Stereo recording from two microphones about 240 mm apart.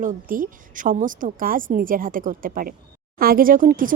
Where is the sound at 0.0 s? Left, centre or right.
Right.